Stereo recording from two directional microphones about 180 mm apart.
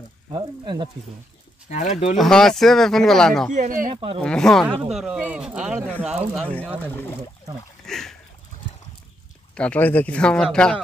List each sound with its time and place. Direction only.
0.3 s speech: 25° right (ahead or behind)
1.7 s speech: 40° left (ahead or behind)
2.1 s speech: centre (ahead or behind)
3.5 s speech: 50° right (ahead or behind)
3.9 s speech: 30° right (ahead or behind)
4.2 s speech: 5° left (ahead or behind)
7.8 s a sound: centre (ahead or behind)
9.6 s speech: 10° left (ahead or behind)